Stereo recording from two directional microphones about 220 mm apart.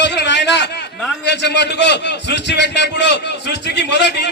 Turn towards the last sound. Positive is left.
turn(degrees=50)  # may be behind; listen again after turning